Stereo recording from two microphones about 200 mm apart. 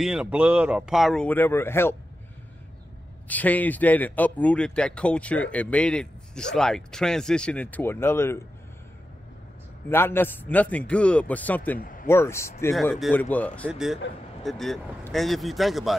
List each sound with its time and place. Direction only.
0.0 s speech: 5° right (ahead or behind)
3.3 s a man's voice: 10° left (ahead or behind)
9.8 s a man's voice: 10° left (ahead or behind)
11.8 s a sound: 45° left (ahead or behind)
12.1 s a man's voice: 15° left (ahead or behind)
12.7 s a man's voice: centre (ahead or behind)